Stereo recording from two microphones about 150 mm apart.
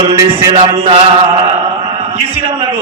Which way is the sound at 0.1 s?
40° right (ahead or behind).